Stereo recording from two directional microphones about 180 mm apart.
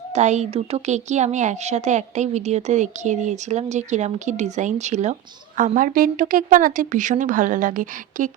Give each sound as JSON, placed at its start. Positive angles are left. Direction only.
{"t": 0.1, "sound": "a woman's voice", "side_deg": -40}